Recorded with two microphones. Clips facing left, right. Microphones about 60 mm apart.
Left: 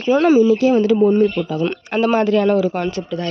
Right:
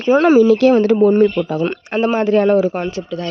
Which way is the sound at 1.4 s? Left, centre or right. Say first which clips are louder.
Right 2 dB; right.